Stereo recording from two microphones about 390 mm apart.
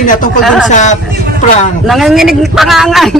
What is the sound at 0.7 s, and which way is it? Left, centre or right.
Speech, centre.